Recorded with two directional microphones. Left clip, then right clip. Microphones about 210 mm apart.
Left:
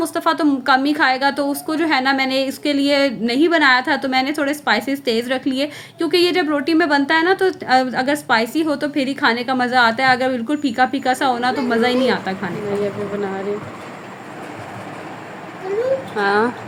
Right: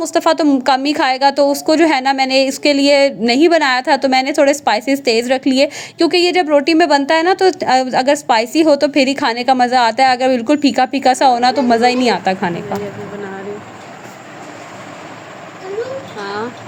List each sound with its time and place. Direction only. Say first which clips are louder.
0.0 s a woman's voice: right 4 dB; 35° right (ahead or behind)
16.1 s speech: left 7 dB; 30° left (ahead or behind)